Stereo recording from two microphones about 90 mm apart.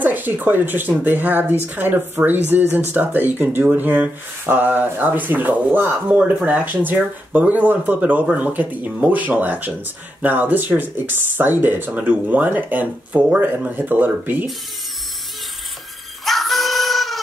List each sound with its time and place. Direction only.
0.0 s speech: 20° right (ahead or behind)
16.3 s music: centre (ahead or behind)